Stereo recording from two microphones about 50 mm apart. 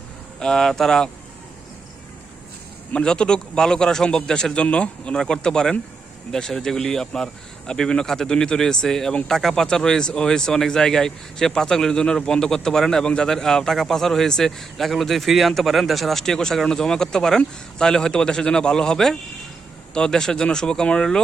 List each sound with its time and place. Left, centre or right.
0.3 s speech: centre
2.9 s speech: centre